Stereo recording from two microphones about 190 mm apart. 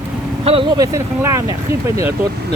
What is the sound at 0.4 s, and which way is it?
Speech, 25° right (ahead or behind).